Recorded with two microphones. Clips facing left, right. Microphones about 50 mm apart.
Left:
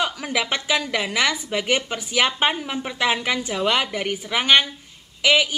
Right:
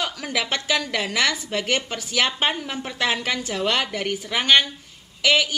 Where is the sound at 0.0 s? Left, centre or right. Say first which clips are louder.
Left 2 dB; centre.